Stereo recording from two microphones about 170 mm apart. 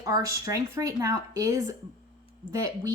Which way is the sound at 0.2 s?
20° right (ahead or behind).